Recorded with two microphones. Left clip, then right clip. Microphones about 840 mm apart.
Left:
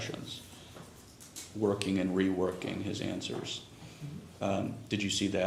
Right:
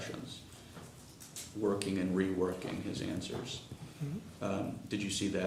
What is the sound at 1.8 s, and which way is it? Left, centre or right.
Speech, left.